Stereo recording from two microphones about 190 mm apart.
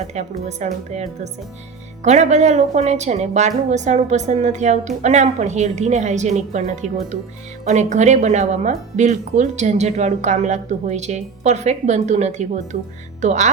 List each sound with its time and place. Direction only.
0.1 s a woman's voice: 35° right (ahead or behind)